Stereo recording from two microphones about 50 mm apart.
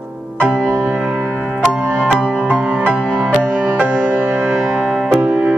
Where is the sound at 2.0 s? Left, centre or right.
Centre.